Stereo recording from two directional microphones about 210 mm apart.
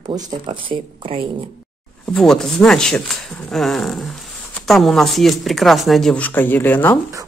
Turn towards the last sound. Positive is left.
turn(degrees=10)  # may be behind; listen again after turning